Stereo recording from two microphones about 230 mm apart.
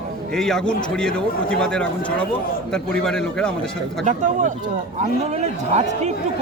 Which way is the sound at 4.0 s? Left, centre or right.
Right.